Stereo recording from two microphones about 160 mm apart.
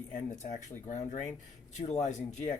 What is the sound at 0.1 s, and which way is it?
Speech, 50° left (ahead or behind).